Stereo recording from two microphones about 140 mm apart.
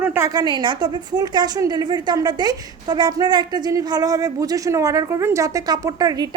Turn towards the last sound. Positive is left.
turn(degrees=-25)  # may be behind; listen again after turning